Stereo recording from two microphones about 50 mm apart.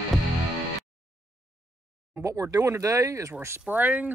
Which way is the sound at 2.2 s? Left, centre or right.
Right.